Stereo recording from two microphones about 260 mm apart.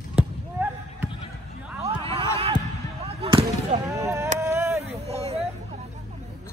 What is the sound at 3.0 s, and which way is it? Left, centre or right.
Basketball bounce, right.